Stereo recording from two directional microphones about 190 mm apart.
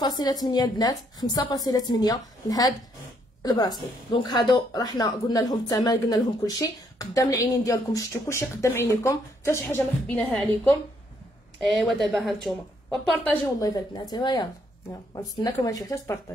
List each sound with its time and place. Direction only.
0.0 s a woman's voice: 20° left (ahead or behind)
11.6 s a woman's voice: centre (ahead or behind)
13.6 s a woman's voice: 20° left (ahead or behind)